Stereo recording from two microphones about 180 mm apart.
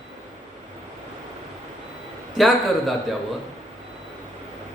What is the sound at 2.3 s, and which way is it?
Speech, centre (ahead or behind).